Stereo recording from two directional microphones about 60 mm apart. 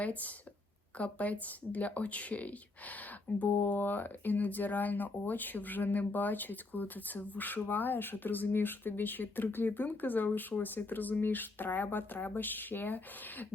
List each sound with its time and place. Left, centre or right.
0.0 s speech: left
3.5 s speech: left